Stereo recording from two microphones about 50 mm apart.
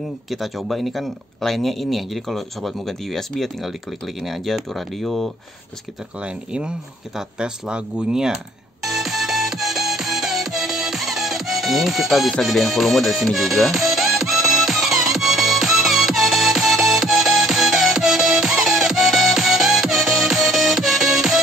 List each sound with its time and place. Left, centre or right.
0.3 s speech: centre
6.2 s speech: centre
8.8 s music: centre